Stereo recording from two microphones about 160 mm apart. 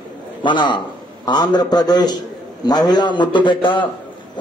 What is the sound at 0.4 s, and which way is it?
A man's voice, 30° left (ahead or behind).